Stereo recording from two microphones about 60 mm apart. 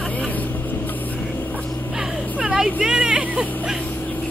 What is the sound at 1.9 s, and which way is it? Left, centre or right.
Vehicle, centre.